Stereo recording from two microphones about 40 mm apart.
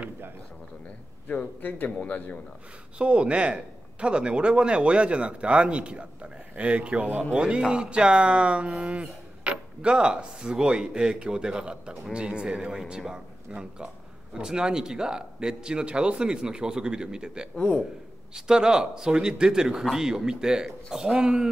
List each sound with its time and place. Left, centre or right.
1.3 s a man's voice: left
3.0 s speech: right